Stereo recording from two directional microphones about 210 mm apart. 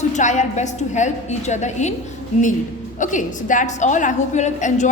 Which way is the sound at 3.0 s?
40° left (ahead or behind).